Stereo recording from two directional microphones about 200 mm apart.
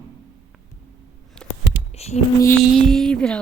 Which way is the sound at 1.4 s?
5° left (ahead or behind).